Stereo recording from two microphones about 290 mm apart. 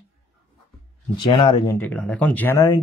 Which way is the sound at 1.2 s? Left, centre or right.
Centre.